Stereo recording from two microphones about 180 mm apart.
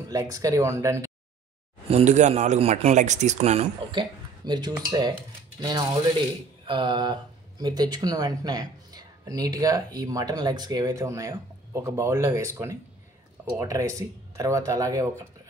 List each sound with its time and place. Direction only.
0.1 s speech: 20° right (ahead or behind)
1.9 s a man's voice: 40° right (ahead or behind); by 15.0 s 20° right (ahead or behind)